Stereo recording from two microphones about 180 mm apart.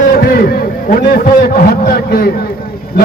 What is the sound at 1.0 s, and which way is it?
A man's voice, 60° left (ahead or behind).